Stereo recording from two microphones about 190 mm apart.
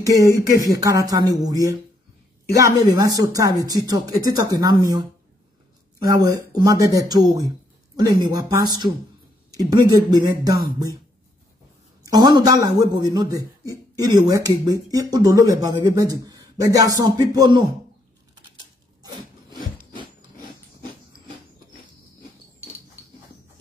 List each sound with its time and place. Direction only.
0.0 s a man's voice: 20° right (ahead or behind)
12.0 s a man's voice: 20° right (ahead or behind)